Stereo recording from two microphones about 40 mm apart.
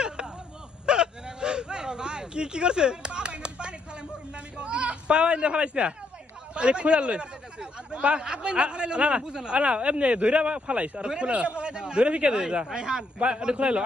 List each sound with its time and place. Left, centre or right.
0.9 s a sound: right
6.5 s speech: right
12.6 s speech: centre